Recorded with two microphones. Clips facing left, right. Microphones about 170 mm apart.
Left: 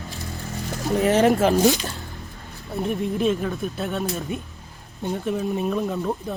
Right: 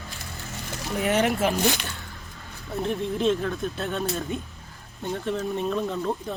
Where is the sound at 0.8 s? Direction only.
40° left (ahead or behind).